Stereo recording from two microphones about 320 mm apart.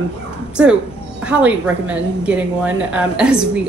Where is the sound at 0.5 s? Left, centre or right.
Centre.